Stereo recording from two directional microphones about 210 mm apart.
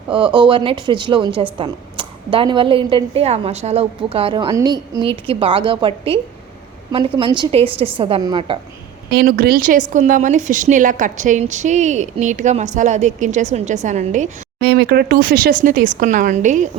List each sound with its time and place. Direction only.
0.3 s a woman's voice: 25° right (ahead or behind)
7.2 s a woman's voice: 20° right (ahead or behind)
9.0 s a woman's voice: 45° right (ahead or behind)
14.6 s a woman's voice: 50° right (ahead or behind)